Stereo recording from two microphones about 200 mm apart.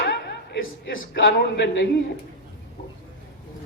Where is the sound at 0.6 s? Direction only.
80° left.